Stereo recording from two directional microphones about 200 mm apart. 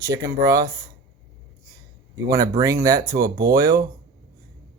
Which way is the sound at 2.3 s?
15° right (ahead or behind).